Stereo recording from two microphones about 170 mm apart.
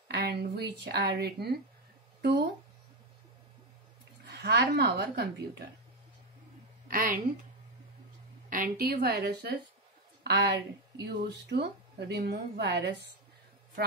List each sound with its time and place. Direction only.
0.1 s speech: 75° right (ahead or behind)
4.3 s speech: 75° right (ahead or behind)
6.9 s a woman's voice: 55° right (ahead or behind)
8.5 s a woman's voice: 55° right (ahead or behind); by 12.9 s 80° right